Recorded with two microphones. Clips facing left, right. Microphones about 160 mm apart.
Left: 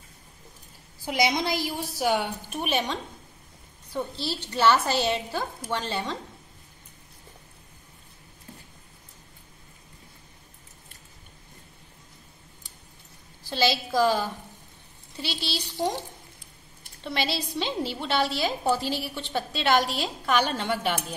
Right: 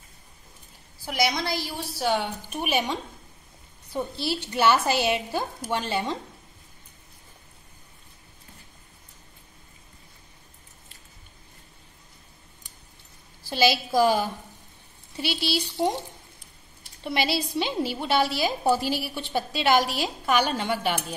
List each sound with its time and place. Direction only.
1.0 s a woman's voice: 20° left (ahead or behind)
2.5 s a woman's voice: 5° right (ahead or behind)
13.5 s a woman's voice: 10° right (ahead or behind)
17.0 s a woman's voice: 10° right (ahead or behind)